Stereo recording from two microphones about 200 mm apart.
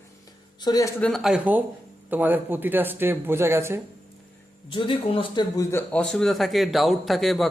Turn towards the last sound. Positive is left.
turn(degrees=0)  # may be behind; listen again after turning